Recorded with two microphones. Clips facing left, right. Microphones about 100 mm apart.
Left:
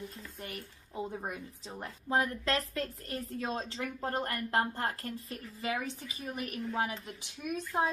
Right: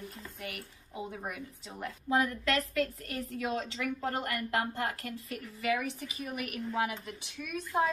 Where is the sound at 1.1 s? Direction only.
30° left (ahead or behind).